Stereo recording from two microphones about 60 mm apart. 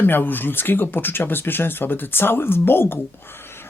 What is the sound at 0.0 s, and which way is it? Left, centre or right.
Speech, left.